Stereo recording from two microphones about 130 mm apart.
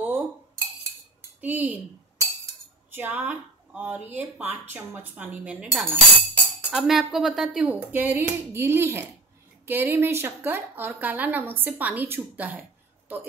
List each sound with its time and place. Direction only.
1.4 s a woman's voice: 15° right (ahead or behind)
2.9 s a woman's voice: 15° right (ahead or behind)
5.9 s music: 15° left (ahead or behind)
6.7 s a woman's voice: 5° right (ahead or behind)